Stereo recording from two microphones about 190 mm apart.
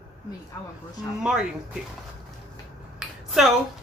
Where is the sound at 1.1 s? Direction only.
5° right (ahead or behind).